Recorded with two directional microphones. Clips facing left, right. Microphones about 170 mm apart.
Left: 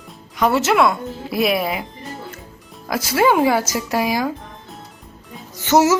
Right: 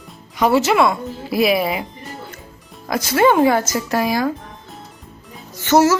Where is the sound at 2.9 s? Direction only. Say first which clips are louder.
Right 2 dB; 5° left (ahead or behind).